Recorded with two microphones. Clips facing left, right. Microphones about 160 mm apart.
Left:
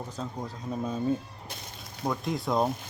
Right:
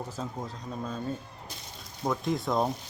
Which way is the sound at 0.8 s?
10° left (ahead or behind).